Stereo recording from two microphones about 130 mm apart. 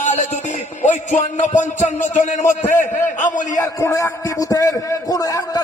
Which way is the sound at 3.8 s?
25° left (ahead or behind).